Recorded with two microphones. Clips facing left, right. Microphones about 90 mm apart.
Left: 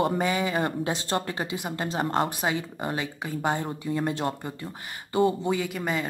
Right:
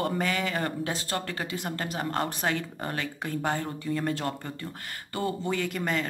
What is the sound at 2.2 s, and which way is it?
Speech, 10° left (ahead or behind).